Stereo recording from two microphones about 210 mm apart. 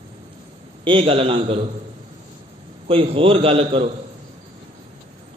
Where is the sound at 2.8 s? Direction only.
25° right (ahead or behind).